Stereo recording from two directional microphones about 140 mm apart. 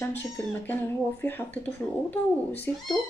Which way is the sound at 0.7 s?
15° left (ahead or behind).